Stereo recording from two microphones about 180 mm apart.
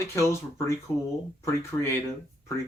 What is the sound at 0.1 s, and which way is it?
Speech, 15° left (ahead or behind).